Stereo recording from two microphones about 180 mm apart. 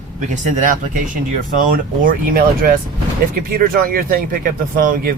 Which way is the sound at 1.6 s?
50° right (ahead or behind).